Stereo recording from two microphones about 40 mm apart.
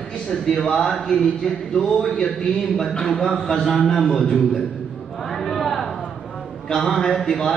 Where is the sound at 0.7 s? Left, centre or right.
Left.